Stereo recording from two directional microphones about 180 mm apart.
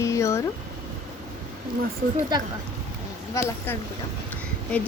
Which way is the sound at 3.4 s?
15° left (ahead or behind).